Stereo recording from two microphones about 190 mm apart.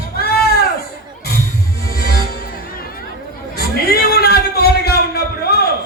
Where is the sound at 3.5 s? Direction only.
55° left (ahead or behind).